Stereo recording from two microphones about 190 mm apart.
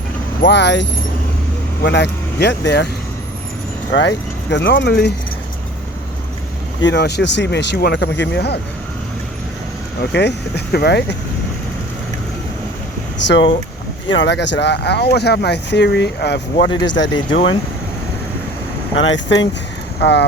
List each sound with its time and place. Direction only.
0.4 s speech: 65° left (ahead or behind)
3.9 s speech: 65° left (ahead or behind)
6.8 s speech: 60° left (ahead or behind)
10.0 s speech: 65° left (ahead or behind)
13.2 s speech: 70° left (ahead or behind)
16.9 s speech: 75° left (ahead or behind)
18.9 s speech: 80° left; by 20.2 s 65° left (ahead or behind)